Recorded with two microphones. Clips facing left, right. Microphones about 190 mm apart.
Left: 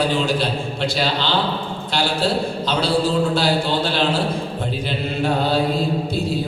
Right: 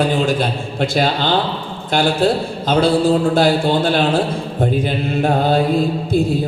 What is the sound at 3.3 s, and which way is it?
Speech, 50° right (ahead or behind).